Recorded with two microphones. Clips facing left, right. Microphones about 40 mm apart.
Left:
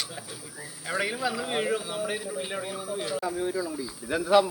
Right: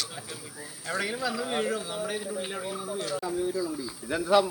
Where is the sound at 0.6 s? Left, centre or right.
Centre.